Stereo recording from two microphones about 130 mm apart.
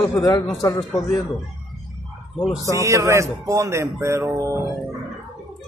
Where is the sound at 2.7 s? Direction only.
25° right (ahead or behind).